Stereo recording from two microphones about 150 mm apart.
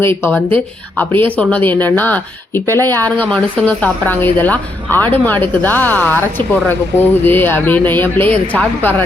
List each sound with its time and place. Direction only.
0.0 s speech: 15° left (ahead or behind)